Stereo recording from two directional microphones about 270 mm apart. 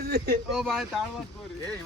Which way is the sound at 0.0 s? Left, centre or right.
Right.